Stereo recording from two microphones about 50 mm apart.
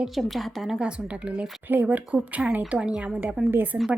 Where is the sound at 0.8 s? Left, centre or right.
Centre.